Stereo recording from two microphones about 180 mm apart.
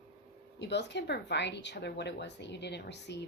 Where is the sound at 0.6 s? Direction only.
70° left (ahead or behind).